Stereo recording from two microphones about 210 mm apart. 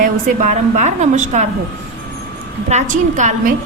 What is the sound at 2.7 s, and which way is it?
Speech, 35° right (ahead or behind).